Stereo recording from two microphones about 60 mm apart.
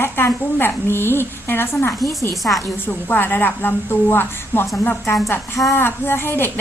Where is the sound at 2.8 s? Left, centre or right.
Left.